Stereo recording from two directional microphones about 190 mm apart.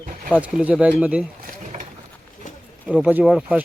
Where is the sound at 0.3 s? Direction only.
5° right (ahead or behind).